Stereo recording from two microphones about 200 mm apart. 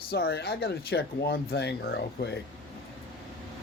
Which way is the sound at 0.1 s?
55° left (ahead or behind).